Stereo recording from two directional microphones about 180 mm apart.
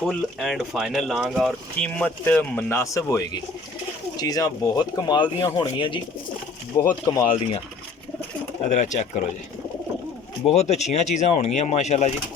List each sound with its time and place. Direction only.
0.0 s speech: centre (ahead or behind); by 6.0 s 25° left (ahead or behind)
6.7 s speech: 15° left (ahead or behind)
8.7 s speech: 40° left (ahead or behind)
10.4 s speech: 40° left (ahead or behind)